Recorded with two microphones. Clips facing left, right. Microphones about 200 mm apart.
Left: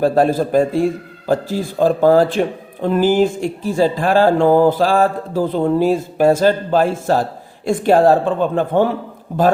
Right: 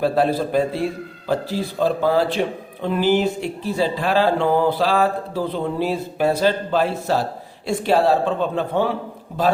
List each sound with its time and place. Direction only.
0.0 s speech: 45° left (ahead or behind)